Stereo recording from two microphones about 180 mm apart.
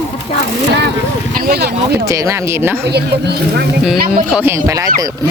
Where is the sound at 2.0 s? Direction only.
15° right (ahead or behind).